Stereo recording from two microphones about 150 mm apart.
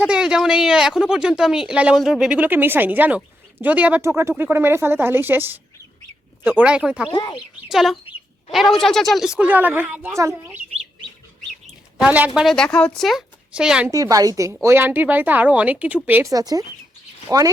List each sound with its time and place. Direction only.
0.0 s a woman's voice: 5° right (ahead or behind)
7.1 s speech: 30° left (ahead or behind)
7.7 s a woman's voice: centre (ahead or behind)
11.9 s a woman's voice: 10° right (ahead or behind)
13.9 s a woman's voice: 25° right (ahead or behind)
16.3 s a woman's voice: 25° right (ahead or behind)